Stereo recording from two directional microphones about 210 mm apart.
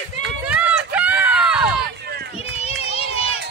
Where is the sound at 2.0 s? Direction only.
50° right (ahead or behind).